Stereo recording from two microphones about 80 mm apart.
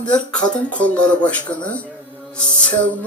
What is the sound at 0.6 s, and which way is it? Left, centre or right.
Speech, centre.